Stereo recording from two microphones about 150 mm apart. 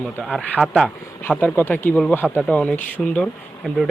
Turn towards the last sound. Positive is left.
turn(degrees=0)  # may be behind; listen again after turning